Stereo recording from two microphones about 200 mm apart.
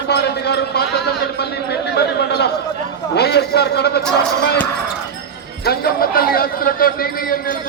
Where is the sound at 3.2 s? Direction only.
55° left (ahead or behind).